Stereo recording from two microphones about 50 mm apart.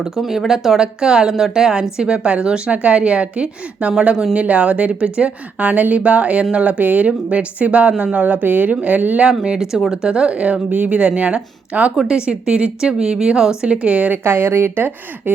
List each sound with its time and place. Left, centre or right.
0.0 s speech: centre; by 9.2 s right
9.4 s speech: centre
14.3 s speech: right